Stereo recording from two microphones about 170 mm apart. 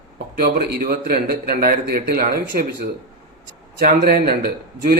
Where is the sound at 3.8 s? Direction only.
60° right (ahead or behind).